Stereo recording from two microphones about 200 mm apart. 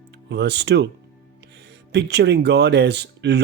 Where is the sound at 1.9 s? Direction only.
55° right (ahead or behind).